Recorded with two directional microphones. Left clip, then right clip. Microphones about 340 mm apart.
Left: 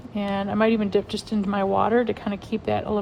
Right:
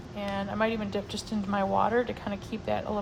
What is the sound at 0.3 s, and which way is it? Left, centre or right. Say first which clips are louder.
Speech: left 7 dB; left.